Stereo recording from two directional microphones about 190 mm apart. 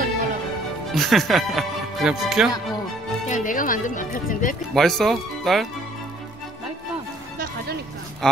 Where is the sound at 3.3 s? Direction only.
45° left (ahead or behind).